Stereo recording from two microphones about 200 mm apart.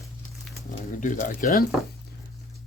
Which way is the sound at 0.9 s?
40° left (ahead or behind).